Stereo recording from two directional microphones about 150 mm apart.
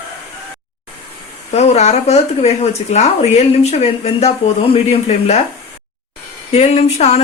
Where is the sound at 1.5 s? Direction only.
45° left (ahead or behind).